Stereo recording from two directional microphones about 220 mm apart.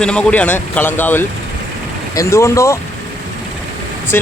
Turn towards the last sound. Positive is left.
turn(degrees=10)  # may be behind; listen again after turning